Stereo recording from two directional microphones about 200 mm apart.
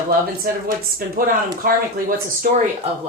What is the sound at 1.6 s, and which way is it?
Speech, 45° right (ahead or behind).